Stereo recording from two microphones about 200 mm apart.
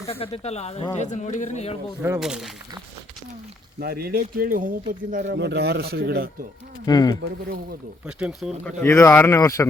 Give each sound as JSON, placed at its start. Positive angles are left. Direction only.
{"t": 0.2, "sound": "speech", "side_deg": 30}
{"t": 2.1, "sound": "speech", "side_deg": 0}
{"t": 3.8, "sound": "speech", "side_deg": -50}
{"t": 5.3, "sound": "speech", "side_deg": -60}
{"t": 6.8, "sound": "speech", "side_deg": 20}
{"t": 8.0, "sound": "speech", "side_deg": -5}
{"t": 8.8, "sound": "speech", "side_deg": 15}